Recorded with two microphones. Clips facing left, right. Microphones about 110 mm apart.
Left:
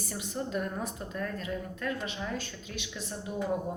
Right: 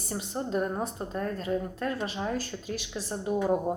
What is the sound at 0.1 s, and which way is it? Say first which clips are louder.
A woman's voice: right 4 dB; 30° right (ahead or behind).